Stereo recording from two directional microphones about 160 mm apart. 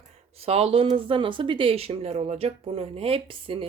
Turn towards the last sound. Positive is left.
turn(degrees=-35)  # may be behind; listen again after turning